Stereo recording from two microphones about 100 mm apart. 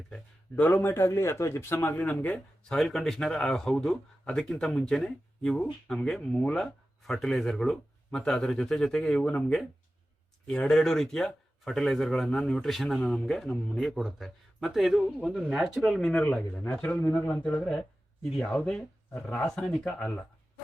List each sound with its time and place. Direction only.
0.1 s speech: 15° left (ahead or behind)
2.7 s speech: 5° left (ahead or behind)